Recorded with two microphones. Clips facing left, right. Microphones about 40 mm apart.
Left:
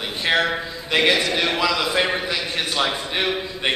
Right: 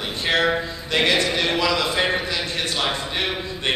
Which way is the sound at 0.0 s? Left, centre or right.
Centre.